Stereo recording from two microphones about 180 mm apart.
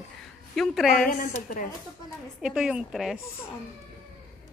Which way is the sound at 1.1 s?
50° left (ahead or behind).